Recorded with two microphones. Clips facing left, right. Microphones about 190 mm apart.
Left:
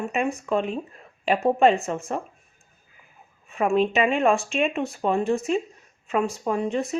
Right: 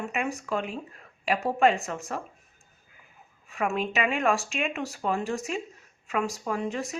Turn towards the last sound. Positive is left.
turn(degrees=30)  # may be behind; listen again after turning